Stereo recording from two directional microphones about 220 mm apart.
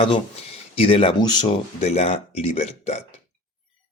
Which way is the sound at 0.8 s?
25° left (ahead or behind).